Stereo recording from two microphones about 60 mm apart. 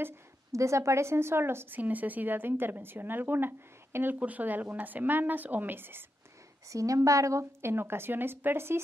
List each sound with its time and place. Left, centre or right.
0.5 s a woman's voice: right
1.8 s speech: right
4.2 s a woman's voice: right
6.7 s a woman's voice: right
7.6 s speech: right